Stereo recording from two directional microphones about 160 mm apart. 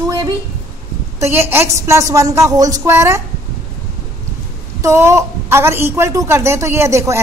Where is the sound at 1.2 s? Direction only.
15° right (ahead or behind).